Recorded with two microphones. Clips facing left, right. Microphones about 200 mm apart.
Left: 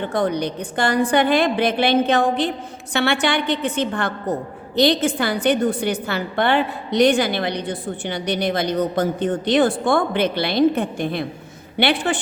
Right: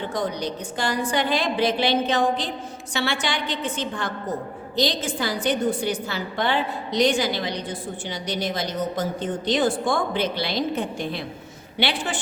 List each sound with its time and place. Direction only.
0.0 s a woman's voice: 60° left (ahead or behind)